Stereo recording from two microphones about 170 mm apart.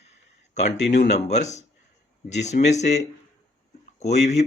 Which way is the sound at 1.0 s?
45° left (ahead or behind).